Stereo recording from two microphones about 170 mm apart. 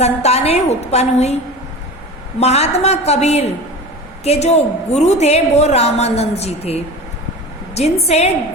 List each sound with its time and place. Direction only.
0.0 s a woman's voice: 40° left (ahead or behind)
2.4 s a woman's voice: 40° left (ahead or behind)